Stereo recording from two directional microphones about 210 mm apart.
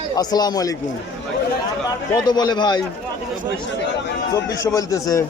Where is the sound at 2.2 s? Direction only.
20° left (ahead or behind).